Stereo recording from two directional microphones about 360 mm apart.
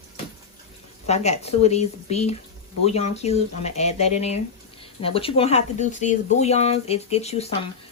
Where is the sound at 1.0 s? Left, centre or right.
Centre.